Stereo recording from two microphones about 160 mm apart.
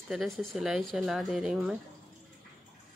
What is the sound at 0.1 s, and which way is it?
Speech, centre (ahead or behind).